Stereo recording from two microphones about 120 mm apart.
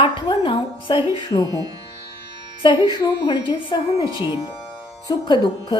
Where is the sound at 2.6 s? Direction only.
40° left (ahead or behind).